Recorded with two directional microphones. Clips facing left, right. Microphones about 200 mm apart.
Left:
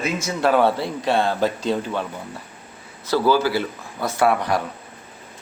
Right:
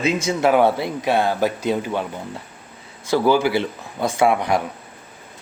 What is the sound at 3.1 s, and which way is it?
A man's voice, 15° right (ahead or behind).